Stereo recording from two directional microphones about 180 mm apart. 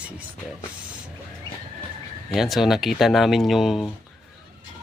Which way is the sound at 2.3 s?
Centre (ahead or behind).